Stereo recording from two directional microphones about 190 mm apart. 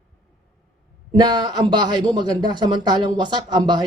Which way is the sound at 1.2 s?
20° right (ahead or behind).